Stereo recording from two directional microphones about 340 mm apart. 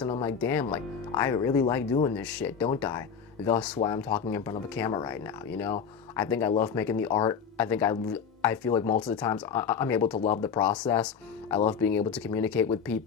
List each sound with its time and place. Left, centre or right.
0.1 s speech: centre
0.3 s speech: centre